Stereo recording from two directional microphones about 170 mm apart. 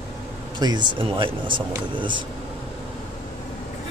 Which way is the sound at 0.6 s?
25° right (ahead or behind).